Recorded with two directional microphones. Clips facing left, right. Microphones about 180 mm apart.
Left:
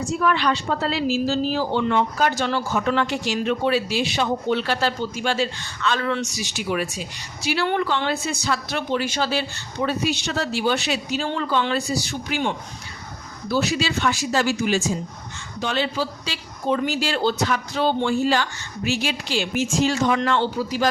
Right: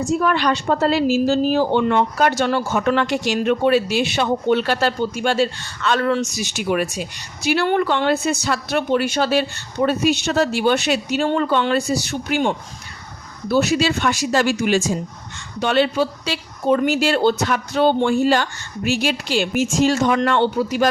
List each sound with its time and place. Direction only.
0.2 s a woman's voice: 45° right (ahead or behind)
14.2 s a woman's voice: 65° right (ahead or behind)
15.6 s a woman's voice: 60° right (ahead or behind)